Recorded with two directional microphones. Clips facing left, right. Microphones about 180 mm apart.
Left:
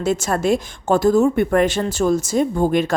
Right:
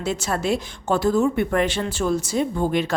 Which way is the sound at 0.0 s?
45° left (ahead or behind).